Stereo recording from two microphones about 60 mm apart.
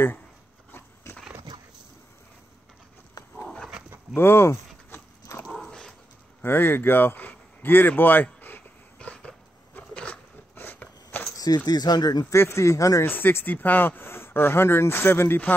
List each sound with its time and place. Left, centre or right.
1.1 s horse: left
4.1 s a sound: left
5.6 s dog: centre
6.4 s speech: left
8.9 s dog: centre
9.8 s a sound: left
11.3 s speech: left
12.4 s speech: left
13.0 s speech: left